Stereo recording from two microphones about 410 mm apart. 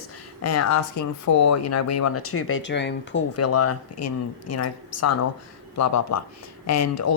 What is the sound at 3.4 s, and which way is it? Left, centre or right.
Speech, left.